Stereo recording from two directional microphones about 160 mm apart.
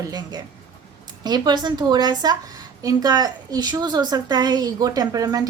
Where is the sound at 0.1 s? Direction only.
25° right (ahead or behind).